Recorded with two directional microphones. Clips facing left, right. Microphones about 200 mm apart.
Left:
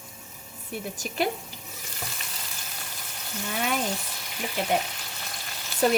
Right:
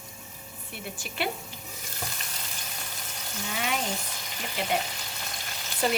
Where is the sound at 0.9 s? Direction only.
40° left (ahead or behind).